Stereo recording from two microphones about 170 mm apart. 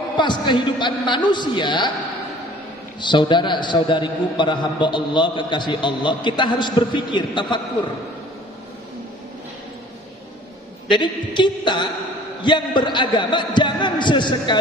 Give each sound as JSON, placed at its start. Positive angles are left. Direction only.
{"t": 0.2, "sound": "a man's voice", "side_deg": 25}
{"t": 3.0, "sound": "a man's voice", "side_deg": 25}
{"t": 10.9, "sound": "a man's voice", "side_deg": 25}